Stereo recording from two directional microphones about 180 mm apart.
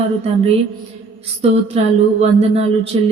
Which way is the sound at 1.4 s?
30° right (ahead or behind).